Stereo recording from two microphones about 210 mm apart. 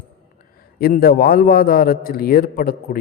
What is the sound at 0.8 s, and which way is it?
A man's voice, 45° left (ahead or behind).